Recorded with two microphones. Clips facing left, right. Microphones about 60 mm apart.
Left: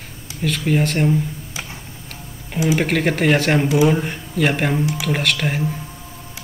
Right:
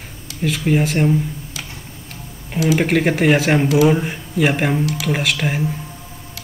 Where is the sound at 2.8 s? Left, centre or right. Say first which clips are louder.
Right 2 dB; centre.